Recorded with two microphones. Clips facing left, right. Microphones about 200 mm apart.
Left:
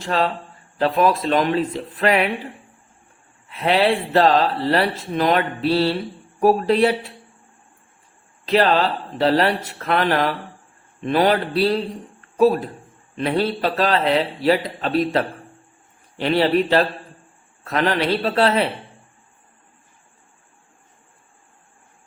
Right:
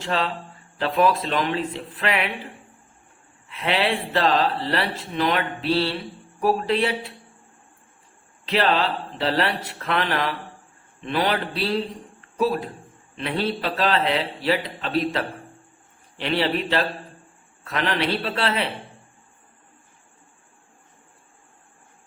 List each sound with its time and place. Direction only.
0.0 s speech: 40° left (ahead or behind)
3.5 s speech: 40° left (ahead or behind)
8.4 s speech: 40° left (ahead or behind)